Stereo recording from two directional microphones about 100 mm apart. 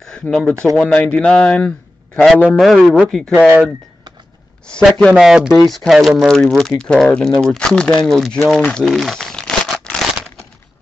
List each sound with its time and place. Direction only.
0.0 s a sound: 5° left (ahead or behind)
0.7 s a man's voice: 10° left (ahead or behind)
4.6 s speech: 10° left (ahead or behind)
5.1 s a man's voice: 5° right (ahead or behind)